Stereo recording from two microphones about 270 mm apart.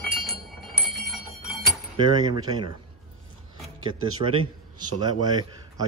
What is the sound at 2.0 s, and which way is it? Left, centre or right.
Speech, centre.